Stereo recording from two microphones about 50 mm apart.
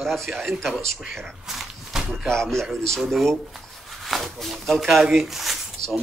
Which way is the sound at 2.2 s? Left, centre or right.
Centre.